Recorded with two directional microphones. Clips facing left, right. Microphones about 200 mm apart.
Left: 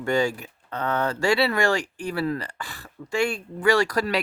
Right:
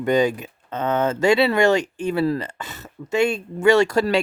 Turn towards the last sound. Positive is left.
turn(degrees=-25)  # may be behind; listen again after turning